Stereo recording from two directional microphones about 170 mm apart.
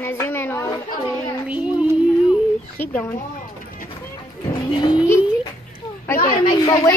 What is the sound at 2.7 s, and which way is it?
Speech, 10° left (ahead or behind).